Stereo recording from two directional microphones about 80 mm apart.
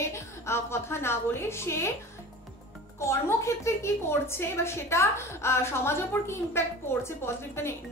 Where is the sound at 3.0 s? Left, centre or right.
Left.